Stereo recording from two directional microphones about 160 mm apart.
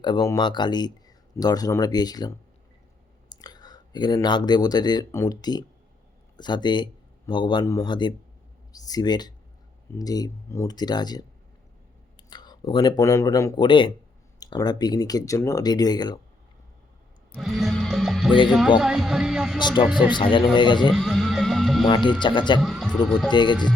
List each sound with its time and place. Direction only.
0.0 s speech: 25° left (ahead or behind)
17.3 s speech: centre (ahead or behind)
18.4 s music: 5° right (ahead or behind)
19.5 s speech: 30° left (ahead or behind)
20.9 s music: centre (ahead or behind)
21.8 s speech: 30° left (ahead or behind)
22.6 s music: centre (ahead or behind)
23.3 s speech: 30° left (ahead or behind)